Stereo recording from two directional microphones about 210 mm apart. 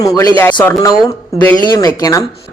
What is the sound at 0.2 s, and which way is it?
Speech, 10° left (ahead or behind).